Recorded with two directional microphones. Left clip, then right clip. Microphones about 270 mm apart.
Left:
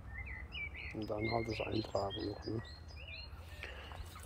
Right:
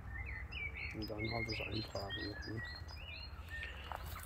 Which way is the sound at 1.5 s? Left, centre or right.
Left.